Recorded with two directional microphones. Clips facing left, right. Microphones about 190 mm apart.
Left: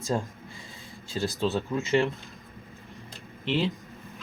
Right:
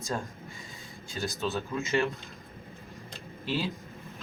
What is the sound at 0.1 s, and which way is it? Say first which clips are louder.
Speech: left 5 dB; 25° left (ahead or behind).